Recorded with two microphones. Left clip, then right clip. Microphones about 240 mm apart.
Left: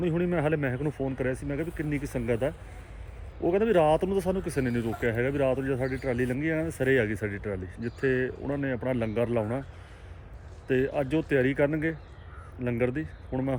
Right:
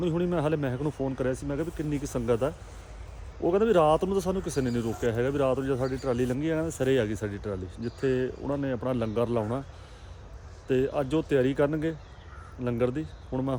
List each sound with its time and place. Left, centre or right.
0.0 s speech: centre
10.7 s speech: centre